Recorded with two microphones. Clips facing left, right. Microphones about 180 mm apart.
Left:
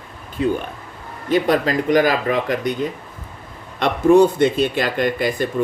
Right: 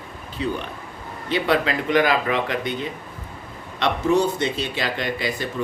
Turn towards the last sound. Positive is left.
turn(degrees=50)  # may be behind; listen again after turning